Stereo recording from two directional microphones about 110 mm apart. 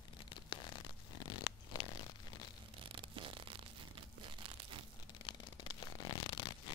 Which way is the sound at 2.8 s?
50° right (ahead or behind).